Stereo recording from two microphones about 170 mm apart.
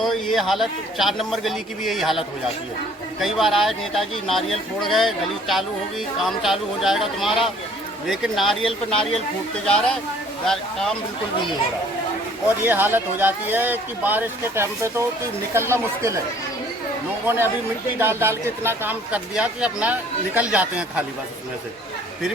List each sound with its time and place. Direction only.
0.0 s speech: centre (ahead or behind)
12.6 s speech: 10° right (ahead or behind)
17.2 s speech: 15° right (ahead or behind)